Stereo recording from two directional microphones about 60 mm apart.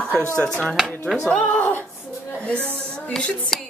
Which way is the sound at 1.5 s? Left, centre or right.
Left.